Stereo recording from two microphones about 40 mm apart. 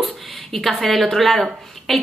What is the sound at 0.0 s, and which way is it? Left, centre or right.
Speech, centre.